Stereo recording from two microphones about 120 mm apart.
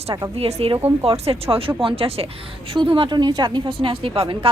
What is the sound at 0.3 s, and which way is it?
A woman's voice, 55° right (ahead or behind).